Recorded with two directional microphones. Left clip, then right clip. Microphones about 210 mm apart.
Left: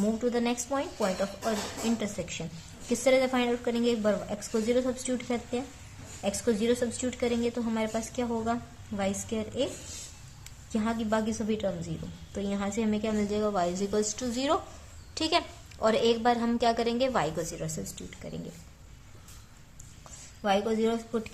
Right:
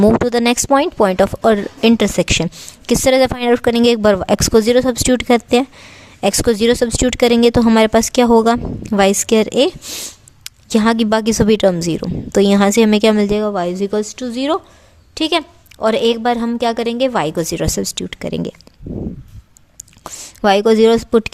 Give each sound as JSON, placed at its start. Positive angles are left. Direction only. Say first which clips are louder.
{"t": 0.3, "sound": "a woman's voice", "louder": "right 16 dB", "side_deg": -55}
{"t": 20.1, "sound": "a woman's voice", "louder": "right 15 dB", "side_deg": -55}